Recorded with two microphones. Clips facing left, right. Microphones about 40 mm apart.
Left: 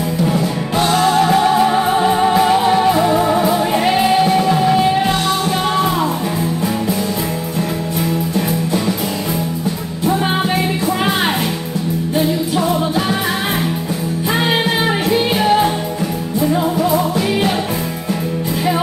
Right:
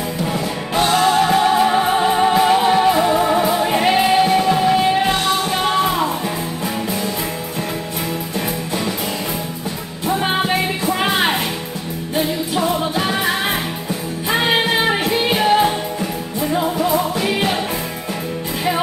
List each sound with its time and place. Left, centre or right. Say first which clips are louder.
0.2 s music: left 5 dB; right
10.0 s music: left 2 dB; right
14.3 s music: right 1 dB; right